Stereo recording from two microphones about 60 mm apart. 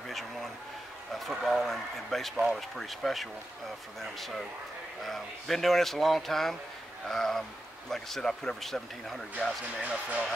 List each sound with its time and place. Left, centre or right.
1.3 s speech: centre
9.8 s speech: right